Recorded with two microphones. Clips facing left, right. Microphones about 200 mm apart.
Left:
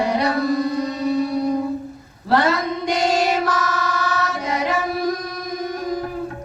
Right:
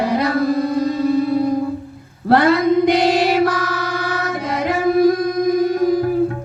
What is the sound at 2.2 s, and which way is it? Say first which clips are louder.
Music: right 6 dB; 55° right (ahead or behind).